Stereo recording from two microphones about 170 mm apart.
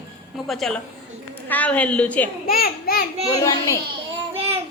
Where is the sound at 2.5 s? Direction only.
60° left (ahead or behind).